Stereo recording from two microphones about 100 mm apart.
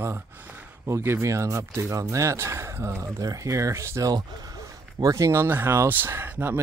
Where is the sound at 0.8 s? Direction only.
25° right (ahead or behind).